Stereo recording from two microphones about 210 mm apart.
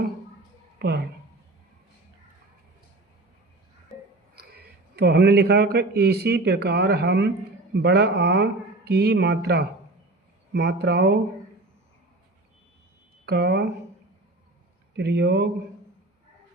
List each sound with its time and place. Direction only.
0.8 s a woman's voice: 50° right (ahead or behind)
4.4 s a man's voice: 50° right (ahead or behind)
13.2 s speech: 50° right (ahead or behind)
14.9 s speech: 55° right (ahead or behind)